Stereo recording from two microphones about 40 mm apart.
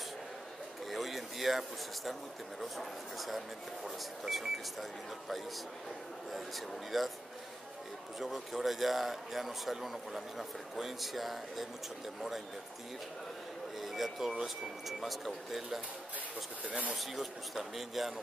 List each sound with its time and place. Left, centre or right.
0.8 s a sound: centre
2.6 s speech: centre
6.9 s speech: centre
8.2 s speech: centre
13.7 s a sound: centre
14.4 s speech: centre
16.6 s speech: right
16.9 s speech: centre